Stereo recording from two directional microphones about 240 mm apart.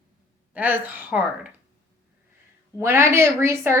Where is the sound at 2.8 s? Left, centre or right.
Centre.